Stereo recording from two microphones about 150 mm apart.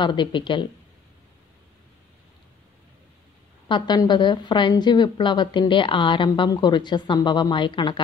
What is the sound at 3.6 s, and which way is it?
A woman's voice, 30° left (ahead or behind).